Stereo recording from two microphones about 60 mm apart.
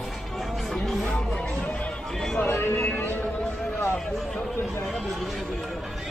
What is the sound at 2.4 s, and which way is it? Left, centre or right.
Vehicle, left.